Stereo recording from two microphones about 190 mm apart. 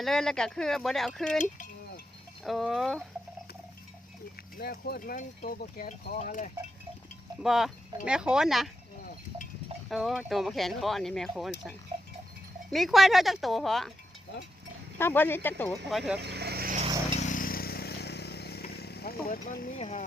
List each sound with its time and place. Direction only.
0.0 s speech: centre (ahead or behind)
2.4 s speech: centre (ahead or behind)
4.5 s speech: 50° left (ahead or behind)
7.4 s speech: centre (ahead or behind)
9.9 s speech: centre (ahead or behind)
12.7 s speech: centre (ahead or behind)
14.9 s speech: 10° left (ahead or behind)
16.2 s vehicle: 60° right (ahead or behind)
17.2 s vehicle: 40° left (ahead or behind)
19.8 s speech: 35° left (ahead or behind)